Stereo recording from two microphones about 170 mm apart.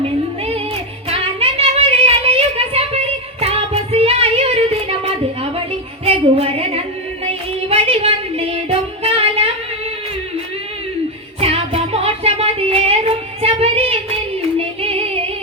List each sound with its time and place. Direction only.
1.1 s a sound: 35° right (ahead or behind)
3.4 s music: 35° right (ahead or behind)
6.1 s female singing: 35° right (ahead or behind)
7.7 s a sound: 35° right (ahead or behind)
9.0 s music: 35° right (ahead or behind)
11.3 s music: 35° right (ahead or behind)